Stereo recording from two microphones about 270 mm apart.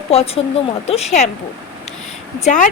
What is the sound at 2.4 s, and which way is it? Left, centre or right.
Speech, left.